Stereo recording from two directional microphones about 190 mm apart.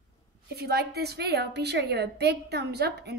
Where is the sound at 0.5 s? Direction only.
55° right (ahead or behind).